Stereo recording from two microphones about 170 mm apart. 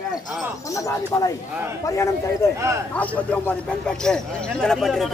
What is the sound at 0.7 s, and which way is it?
A man's voice, 20° left (ahead or behind).